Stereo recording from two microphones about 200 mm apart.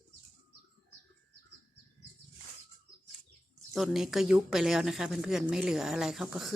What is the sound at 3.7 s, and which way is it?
Speech, centre (ahead or behind).